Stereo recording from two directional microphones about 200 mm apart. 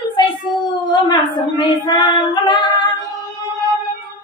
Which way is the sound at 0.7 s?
20° left (ahead or behind).